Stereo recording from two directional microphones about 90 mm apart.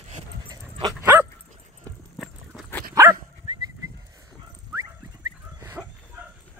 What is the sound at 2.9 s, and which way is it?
Dog, 30° right (ahead or behind).